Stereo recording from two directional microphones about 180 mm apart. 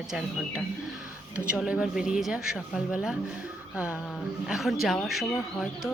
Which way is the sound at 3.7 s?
5° right (ahead or behind).